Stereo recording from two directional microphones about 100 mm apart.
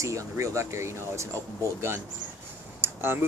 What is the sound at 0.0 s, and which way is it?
Speech, 30° right (ahead or behind).